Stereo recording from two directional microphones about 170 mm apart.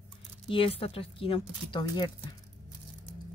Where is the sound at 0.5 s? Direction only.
35° left (ahead or behind).